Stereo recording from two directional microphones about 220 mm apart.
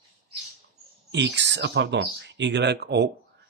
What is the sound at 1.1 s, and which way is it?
Speech, 50° right (ahead or behind).